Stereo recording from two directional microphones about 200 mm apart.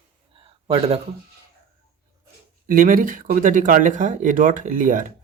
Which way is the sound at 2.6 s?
45° right (ahead or behind).